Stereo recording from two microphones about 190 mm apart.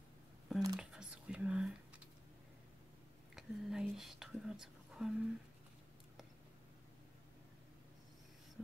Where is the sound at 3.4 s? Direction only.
Centre (ahead or behind).